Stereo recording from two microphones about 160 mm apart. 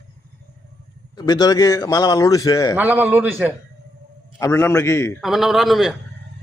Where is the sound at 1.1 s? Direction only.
25° left (ahead or behind).